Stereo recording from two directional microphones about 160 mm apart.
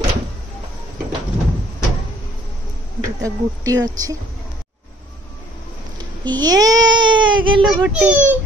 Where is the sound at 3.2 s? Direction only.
20° right (ahead or behind).